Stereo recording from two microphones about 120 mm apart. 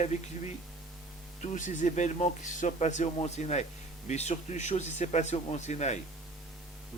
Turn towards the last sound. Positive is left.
turn(degrees=75)  # may be behind; listen again after turning